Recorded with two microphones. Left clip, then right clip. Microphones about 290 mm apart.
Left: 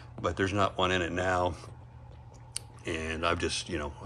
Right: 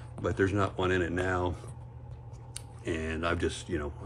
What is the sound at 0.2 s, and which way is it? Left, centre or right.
Speech, centre.